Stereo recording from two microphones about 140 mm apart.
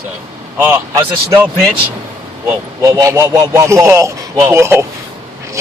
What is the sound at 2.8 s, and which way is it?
A man's voice, 25° right (ahead or behind).